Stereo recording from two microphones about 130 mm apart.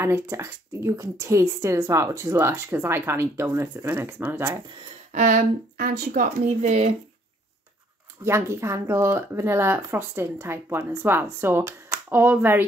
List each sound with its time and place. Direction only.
0.0 s speech: 20° right (ahead or behind)
5.1 s speech: 85° right; by 6.9 s 55° right (ahead or behind)
8.2 s speech: 20° right (ahead or behind)